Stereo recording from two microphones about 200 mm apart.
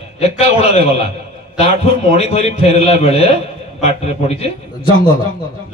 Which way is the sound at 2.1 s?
30° left (ahead or behind).